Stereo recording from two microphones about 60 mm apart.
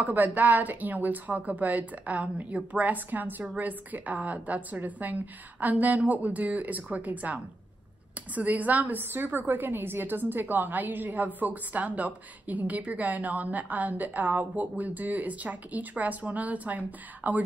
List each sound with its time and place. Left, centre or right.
0.0 s a woman's voice: right